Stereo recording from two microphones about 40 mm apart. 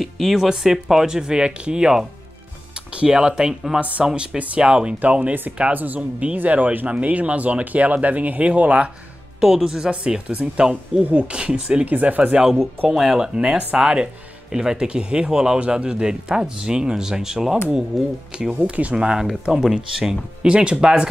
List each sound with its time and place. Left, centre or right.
0.0 s speech: centre
2.7 s music: right
3.2 s speech: centre
4.1 s speech: right
5.6 s speech: right
5.9 s speech: right
9.4 s speech: centre
9.7 s speech: right
11.8 s speech: right
12.4 s speech: centre
18.5 s speech: right
18.9 s speech: centre